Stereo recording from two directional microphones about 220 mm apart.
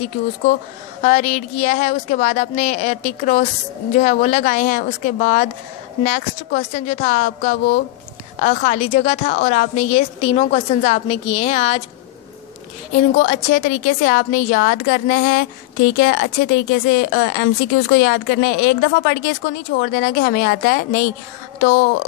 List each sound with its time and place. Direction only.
1.0 s a woman's voice: 35° left (ahead or behind)
12.9 s a woman's voice: 35° left (ahead or behind)